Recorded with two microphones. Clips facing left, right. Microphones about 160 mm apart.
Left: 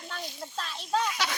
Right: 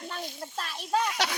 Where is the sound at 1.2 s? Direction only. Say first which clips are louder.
Right 1 dB; 70° right (ahead or behind).